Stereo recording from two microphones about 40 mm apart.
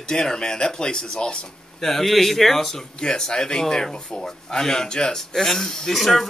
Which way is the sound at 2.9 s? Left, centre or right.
Centre.